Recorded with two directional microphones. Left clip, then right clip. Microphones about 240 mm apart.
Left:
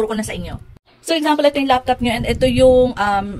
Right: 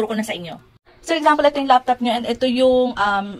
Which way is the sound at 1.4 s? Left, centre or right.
Left.